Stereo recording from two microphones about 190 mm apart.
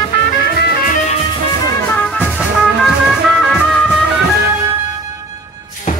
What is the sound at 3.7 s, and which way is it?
Music, centre (ahead or behind).